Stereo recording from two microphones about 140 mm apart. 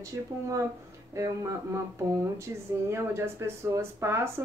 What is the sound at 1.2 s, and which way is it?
Speech, 20° right (ahead or behind).